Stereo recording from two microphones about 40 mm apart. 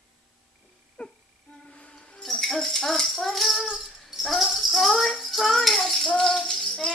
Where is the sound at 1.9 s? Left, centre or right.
Left.